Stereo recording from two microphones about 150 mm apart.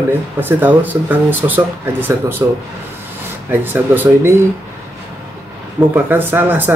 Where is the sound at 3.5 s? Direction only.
15° right (ahead or behind).